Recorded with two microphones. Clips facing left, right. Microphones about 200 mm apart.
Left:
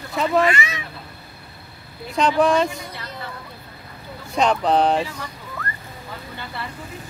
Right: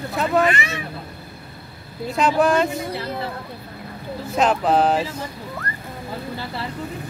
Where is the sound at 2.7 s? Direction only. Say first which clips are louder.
Right 8 dB; 25° right (ahead or behind).